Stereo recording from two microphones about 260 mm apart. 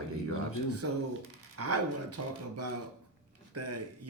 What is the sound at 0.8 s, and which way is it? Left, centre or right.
A man's voice, right.